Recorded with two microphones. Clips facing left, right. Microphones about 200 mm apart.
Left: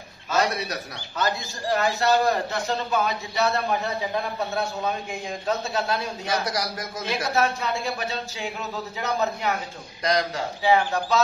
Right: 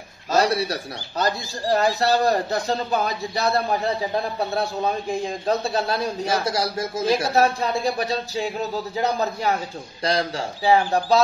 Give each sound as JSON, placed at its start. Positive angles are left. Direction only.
{"t": 0.3, "sound": "speech", "side_deg": -35}